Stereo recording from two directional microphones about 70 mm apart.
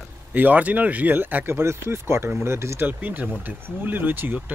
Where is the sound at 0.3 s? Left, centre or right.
Right.